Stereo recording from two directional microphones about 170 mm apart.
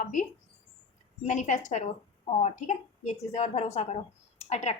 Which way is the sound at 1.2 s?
45° left (ahead or behind).